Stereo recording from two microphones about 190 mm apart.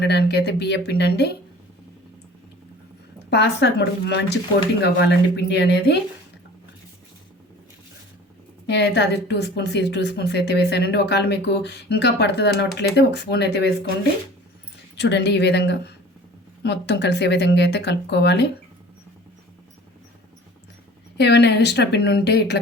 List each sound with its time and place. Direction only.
0.0 s a woman's voice: 60° left (ahead or behind)
3.2 s a woman's voice: 60° left (ahead or behind)
8.6 s a woman's voice: 60° left (ahead or behind)
14.9 s a woman's voice: 65° left (ahead or behind)
21.2 s a woman's voice: 65° left (ahead or behind)